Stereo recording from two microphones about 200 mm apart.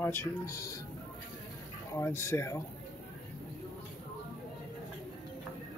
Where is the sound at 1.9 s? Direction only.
15° left (ahead or behind).